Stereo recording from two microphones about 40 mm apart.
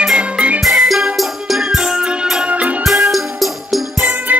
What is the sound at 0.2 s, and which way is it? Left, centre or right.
Music, right.